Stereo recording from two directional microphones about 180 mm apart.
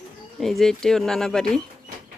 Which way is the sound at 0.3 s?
Centre (ahead or behind).